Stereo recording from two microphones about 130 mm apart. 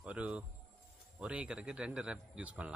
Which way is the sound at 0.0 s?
10° right (ahead or behind).